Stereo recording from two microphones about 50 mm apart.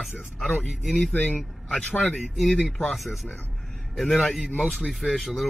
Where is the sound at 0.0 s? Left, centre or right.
Centre.